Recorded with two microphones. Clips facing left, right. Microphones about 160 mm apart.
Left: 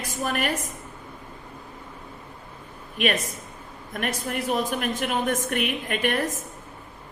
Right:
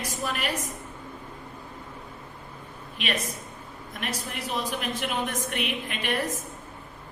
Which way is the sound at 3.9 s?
50° left (ahead or behind).